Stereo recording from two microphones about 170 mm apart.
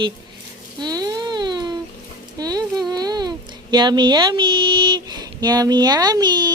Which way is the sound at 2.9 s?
25° right (ahead or behind).